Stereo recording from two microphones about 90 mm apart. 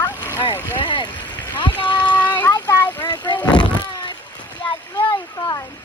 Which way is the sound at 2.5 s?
50° left (ahead or behind).